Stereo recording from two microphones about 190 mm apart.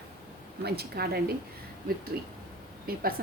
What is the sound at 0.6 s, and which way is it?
A woman's voice, 55° right (ahead or behind).